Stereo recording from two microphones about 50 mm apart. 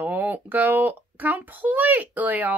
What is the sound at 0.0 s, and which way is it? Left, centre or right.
A child's voice, right.